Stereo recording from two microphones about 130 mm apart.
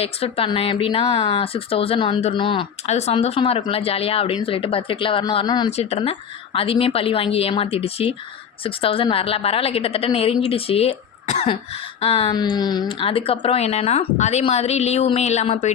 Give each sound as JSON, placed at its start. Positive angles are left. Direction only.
{"t": 0.0, "sound": "speech", "side_deg": 50}
{"t": 2.8, "sound": "speech", "side_deg": 55}
{"t": 5.7, "sound": "speech", "side_deg": 55}
{"t": 11.4, "sound": "speech", "side_deg": 45}